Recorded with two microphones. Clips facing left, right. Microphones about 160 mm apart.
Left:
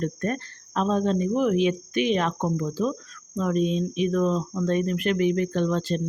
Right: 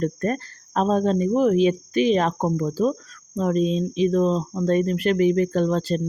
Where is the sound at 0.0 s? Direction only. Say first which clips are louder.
Right 4 dB; 40° right (ahead or behind).